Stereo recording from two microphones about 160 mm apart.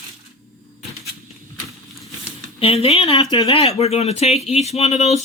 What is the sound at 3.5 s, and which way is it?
Speech, 40° left (ahead or behind).